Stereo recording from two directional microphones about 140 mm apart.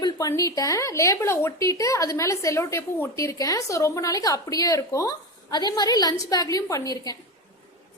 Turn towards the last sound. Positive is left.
turn(degrees=25)  # may be behind; listen again after turning